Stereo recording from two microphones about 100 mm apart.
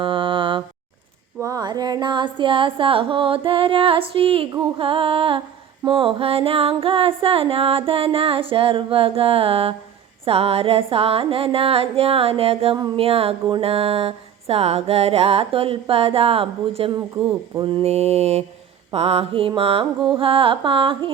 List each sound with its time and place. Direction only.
0.0 s mantra: 60° right (ahead or behind)
1.4 s a sound: 35° right (ahead or behind); by 5.4 s 65° right (ahead or behind)
5.8 s music: 60° right (ahead or behind)
10.2 s music: 80° right
17.6 s mantra: 60° right (ahead or behind); by 18.4 s 90° right
18.9 s music: 90° right; by 19.9 s 65° right (ahead or behind)
20.1 s a sound: 60° right (ahead or behind)